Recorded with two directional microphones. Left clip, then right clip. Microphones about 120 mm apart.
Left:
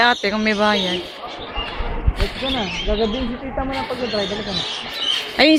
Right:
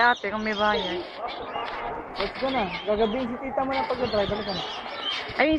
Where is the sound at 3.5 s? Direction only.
15° left (ahead or behind).